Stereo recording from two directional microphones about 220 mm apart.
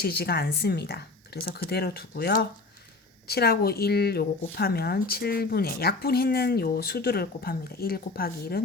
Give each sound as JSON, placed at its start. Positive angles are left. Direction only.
{"t": 0.0, "sound": "a woman's voice", "side_deg": 45}